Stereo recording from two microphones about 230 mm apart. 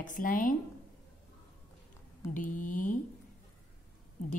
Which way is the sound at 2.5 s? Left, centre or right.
Left.